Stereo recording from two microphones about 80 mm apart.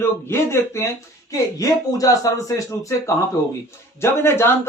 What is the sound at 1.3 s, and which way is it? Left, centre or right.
Speech, left.